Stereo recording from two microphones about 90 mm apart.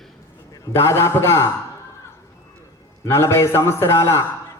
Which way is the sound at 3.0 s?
30° left (ahead or behind).